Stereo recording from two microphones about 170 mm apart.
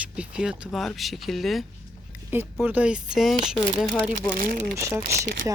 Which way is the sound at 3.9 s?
10° left (ahead or behind).